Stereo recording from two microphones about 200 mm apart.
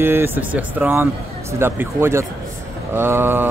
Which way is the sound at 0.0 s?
10° right (ahead or behind).